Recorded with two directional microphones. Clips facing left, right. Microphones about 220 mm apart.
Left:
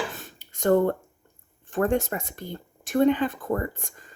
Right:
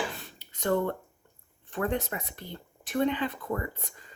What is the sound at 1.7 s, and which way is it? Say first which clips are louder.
Speech: left 6 dB; 45° left (ahead or behind).